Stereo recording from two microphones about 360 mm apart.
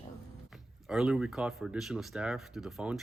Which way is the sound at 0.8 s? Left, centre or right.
Centre.